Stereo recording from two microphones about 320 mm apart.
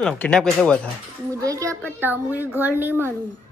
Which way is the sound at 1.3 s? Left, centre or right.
Centre.